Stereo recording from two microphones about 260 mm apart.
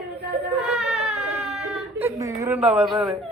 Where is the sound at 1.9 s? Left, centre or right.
Centre.